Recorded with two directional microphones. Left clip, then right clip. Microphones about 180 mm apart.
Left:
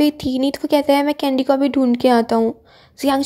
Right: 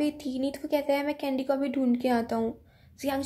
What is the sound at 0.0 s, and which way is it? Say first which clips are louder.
A woman's voice: left 12 dB; 40° left (ahead or behind).